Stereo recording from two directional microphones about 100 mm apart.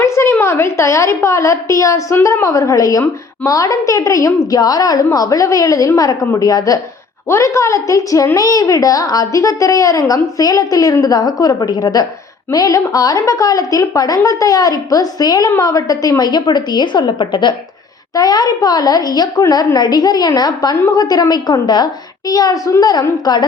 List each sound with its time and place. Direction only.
0.0 s a woman's voice: 25° left (ahead or behind); by 23.5 s 45° left (ahead or behind)